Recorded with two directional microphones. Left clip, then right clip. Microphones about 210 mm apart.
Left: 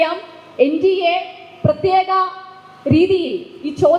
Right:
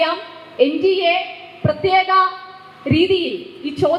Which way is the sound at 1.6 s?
35° left (ahead or behind).